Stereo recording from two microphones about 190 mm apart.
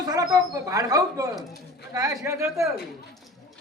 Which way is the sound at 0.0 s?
20° right (ahead or behind).